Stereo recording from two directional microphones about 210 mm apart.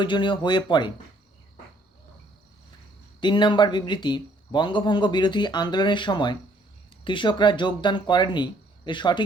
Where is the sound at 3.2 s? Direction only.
20° left (ahead or behind).